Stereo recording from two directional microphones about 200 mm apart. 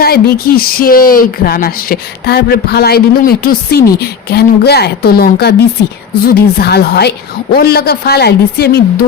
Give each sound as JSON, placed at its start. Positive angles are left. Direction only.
{"t": 0.0, "sound": "speech", "side_deg": 50}